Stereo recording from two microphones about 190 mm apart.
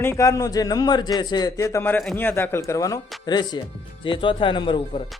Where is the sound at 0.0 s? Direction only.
15° left (ahead or behind).